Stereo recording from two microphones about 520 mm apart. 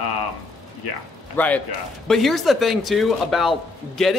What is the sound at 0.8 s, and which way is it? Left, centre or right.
Speech, left.